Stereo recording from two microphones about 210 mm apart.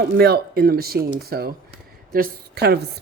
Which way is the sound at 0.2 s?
50° right (ahead or behind).